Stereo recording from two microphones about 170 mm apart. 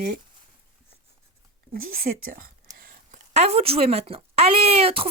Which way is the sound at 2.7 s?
55° right (ahead or behind).